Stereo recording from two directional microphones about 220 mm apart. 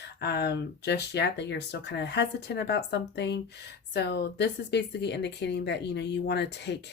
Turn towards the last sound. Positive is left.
turn(degrees=50)  # may be behind; listen again after turning